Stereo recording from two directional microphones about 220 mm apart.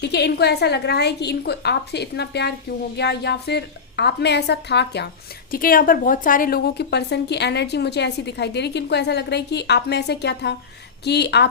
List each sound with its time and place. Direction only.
0.0 s a woman's voice: 50° left (ahead or behind)